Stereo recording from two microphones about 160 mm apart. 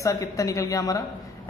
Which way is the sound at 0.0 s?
20° left (ahead or behind).